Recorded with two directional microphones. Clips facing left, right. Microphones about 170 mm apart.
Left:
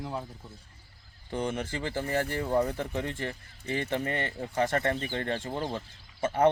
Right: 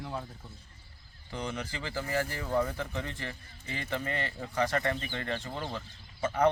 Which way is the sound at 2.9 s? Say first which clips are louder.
Left 5 dB; 50° left (ahead or behind).